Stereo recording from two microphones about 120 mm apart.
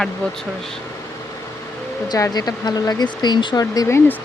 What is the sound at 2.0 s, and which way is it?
Speech, 30° left (ahead or behind).